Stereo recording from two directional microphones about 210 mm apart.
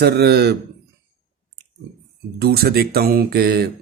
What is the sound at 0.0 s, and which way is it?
Speech, 50° right (ahead or behind).